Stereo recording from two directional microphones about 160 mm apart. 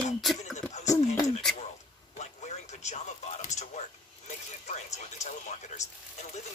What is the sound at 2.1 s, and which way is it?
Speech, 45° left (ahead or behind).